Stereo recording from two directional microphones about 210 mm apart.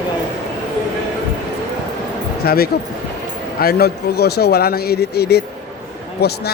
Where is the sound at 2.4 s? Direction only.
45° left (ahead or behind).